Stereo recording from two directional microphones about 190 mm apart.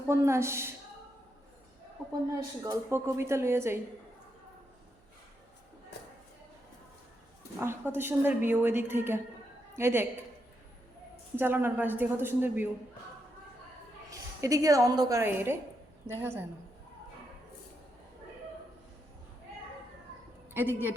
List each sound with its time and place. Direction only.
0.1 s a woman's voice: 15° right (ahead or behind)
2.3 s a woman's voice: 15° right (ahead or behind)
7.6 s a woman's voice: 10° right (ahead or behind)
11.3 s a woman's voice: 10° right (ahead or behind)
14.1 s a woman's voice: 15° right (ahead or behind)
20.5 s a woman's voice: 10° right (ahead or behind)